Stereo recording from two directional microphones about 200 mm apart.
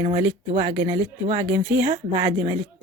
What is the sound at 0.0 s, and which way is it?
A woman's voice, 25° right (ahead or behind).